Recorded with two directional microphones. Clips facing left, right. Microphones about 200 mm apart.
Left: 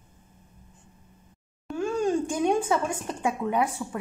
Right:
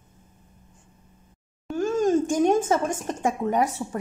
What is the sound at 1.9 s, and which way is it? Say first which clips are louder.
A woman's voice: right 5 dB; 40° right (ahead or behind).